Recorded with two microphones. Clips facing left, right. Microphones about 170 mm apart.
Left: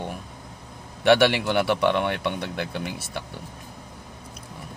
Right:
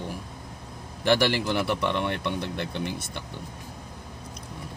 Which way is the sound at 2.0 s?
Centre (ahead or behind).